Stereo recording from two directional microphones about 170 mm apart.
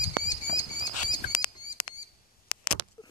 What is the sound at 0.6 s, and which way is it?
Bird, 25° left (ahead or behind).